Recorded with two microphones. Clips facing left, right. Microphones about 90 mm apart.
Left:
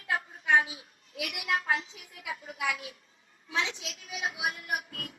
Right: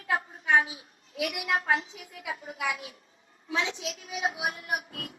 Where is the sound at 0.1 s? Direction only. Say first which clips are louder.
Right 1 dB; 35° right (ahead or behind).